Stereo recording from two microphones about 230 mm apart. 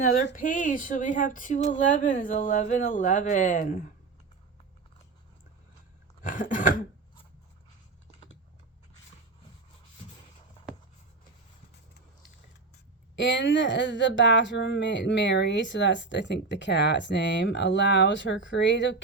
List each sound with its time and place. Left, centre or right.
0.3 s speech: left
6.2 s speech: left
13.1 s speech: left